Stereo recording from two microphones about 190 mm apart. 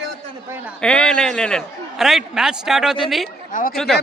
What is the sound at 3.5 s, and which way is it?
Speech, 45° left (ahead or behind).